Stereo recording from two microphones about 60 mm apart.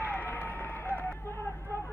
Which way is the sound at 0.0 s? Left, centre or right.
Left.